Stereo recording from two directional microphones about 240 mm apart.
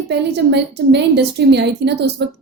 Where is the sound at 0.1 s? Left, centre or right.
Right.